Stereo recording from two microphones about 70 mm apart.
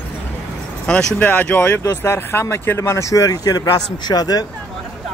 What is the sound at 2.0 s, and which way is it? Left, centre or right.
Speech, left.